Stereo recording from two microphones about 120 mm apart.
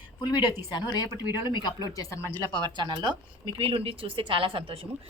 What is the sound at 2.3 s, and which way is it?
Speech, 35° right (ahead or behind).